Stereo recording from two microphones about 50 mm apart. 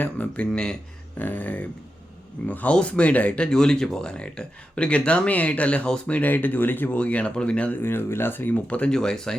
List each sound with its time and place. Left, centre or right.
0.0 s speech: left
0.5 s speech: centre
1.2 s speech: left
2.7 s speech: left
6.9 s speech: left
7.8 s speech: left
8.9 s speech: centre